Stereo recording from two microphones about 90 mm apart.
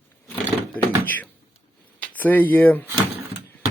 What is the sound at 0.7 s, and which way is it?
Thunk, 20° left (ahead or behind).